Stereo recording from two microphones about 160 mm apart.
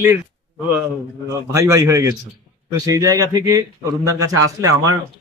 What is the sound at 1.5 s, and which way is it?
Speech, 20° right (ahead or behind).